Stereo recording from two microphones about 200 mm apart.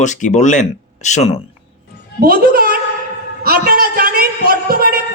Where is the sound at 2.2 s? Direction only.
50° right (ahead or behind).